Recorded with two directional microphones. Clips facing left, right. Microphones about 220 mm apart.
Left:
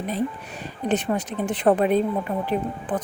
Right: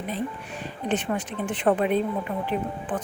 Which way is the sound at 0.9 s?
40° left (ahead or behind).